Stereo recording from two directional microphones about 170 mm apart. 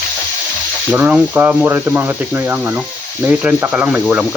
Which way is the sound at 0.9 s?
10° right (ahead or behind).